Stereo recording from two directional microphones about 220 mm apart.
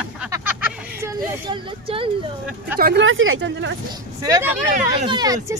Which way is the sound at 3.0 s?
65° right (ahead or behind).